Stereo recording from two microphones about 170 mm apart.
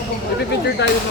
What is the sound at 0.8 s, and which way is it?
Speech, 90° left.